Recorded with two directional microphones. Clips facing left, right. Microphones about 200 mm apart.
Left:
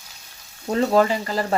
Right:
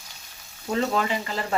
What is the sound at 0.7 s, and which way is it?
Stir, 40° left (ahead or behind).